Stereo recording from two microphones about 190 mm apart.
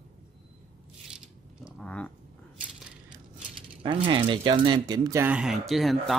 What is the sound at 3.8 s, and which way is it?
Speech, 25° right (ahead or behind).